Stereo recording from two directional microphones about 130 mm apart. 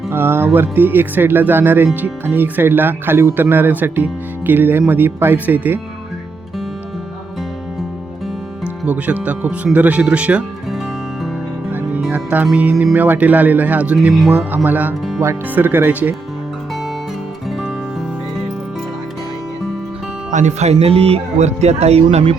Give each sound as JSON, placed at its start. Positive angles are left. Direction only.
{"t": 0.1, "sound": "speech", "side_deg": -20}
{"t": 8.6, "sound": "speech", "side_deg": -10}
{"t": 11.7, "sound": "music", "side_deg": -10}
{"t": 12.5, "sound": "speech", "side_deg": -10}
{"t": 14.5, "sound": "speech", "side_deg": -15}
{"t": 20.3, "sound": "speech", "side_deg": -60}